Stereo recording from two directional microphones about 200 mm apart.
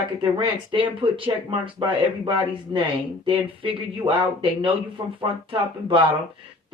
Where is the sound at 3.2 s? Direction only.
25° right (ahead or behind).